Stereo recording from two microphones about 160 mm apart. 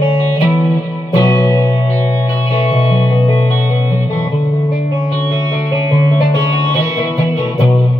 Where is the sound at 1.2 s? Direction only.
15° left (ahead or behind).